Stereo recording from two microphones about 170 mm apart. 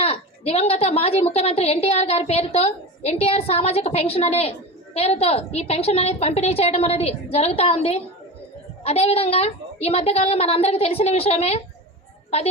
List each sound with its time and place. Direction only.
0.0 s a woman's voice: 35° left (ahead or behind)